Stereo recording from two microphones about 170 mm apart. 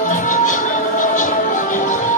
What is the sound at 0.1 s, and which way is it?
Music, 50° left (ahead or behind).